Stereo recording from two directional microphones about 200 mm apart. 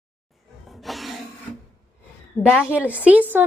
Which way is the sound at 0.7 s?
Centre (ahead or behind).